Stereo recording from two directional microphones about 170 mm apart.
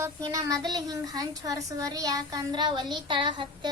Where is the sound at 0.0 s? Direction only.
20° right (ahead or behind).